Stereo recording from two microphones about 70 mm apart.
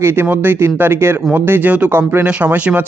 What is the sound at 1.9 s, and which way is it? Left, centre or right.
Speech, right.